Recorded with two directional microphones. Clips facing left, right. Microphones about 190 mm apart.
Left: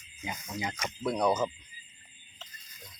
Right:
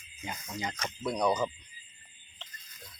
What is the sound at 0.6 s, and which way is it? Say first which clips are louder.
Speech: left 2 dB; 10° left (ahead or behind).